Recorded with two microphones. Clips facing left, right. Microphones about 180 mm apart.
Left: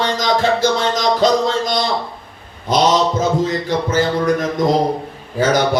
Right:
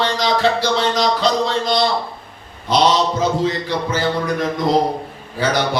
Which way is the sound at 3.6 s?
45° left (ahead or behind).